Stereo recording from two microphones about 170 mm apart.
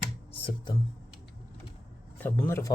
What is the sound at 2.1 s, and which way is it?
Speech, 10° left (ahead or behind).